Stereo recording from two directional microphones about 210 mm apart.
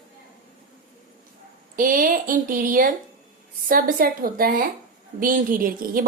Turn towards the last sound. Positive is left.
turn(degrees=-40)  # may be behind; listen again after turning